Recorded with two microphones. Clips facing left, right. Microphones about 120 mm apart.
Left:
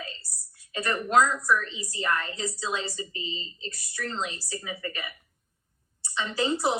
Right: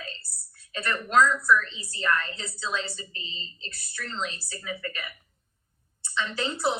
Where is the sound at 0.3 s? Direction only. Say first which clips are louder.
Left 2 dB; 60° right (ahead or behind).